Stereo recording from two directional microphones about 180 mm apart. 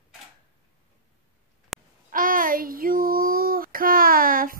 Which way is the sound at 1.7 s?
Centre (ahead or behind).